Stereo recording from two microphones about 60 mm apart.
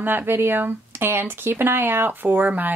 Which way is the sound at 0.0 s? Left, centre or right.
Right.